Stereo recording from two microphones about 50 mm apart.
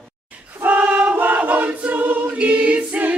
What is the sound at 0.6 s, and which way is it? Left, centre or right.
Choir, right.